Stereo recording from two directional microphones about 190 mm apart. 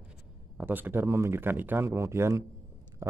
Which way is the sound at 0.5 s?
10° right (ahead or behind).